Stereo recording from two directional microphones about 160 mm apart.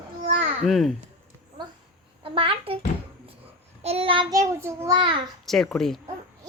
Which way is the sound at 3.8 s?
35° right (ahead or behind).